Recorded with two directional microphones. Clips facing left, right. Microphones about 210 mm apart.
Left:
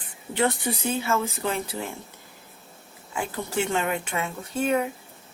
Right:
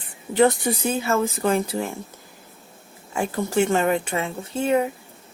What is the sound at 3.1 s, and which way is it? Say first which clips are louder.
Speech: right 6 dB; 45° right (ahead or behind).